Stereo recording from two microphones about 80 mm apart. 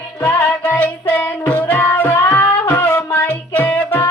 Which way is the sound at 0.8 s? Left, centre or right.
Left.